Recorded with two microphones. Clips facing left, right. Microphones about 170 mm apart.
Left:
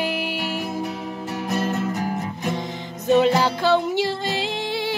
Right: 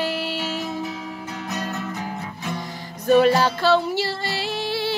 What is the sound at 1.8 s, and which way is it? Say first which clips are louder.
Music: left 5 dB; 45° left (ahead or behind).